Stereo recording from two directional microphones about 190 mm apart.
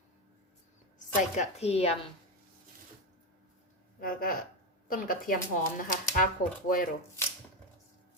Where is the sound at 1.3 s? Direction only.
35° left (ahead or behind).